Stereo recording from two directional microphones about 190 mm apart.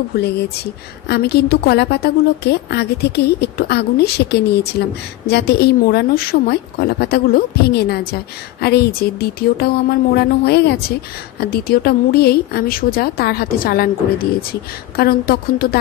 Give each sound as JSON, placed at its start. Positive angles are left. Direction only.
{"t": 0.1, "sound": "speech", "side_deg": 60}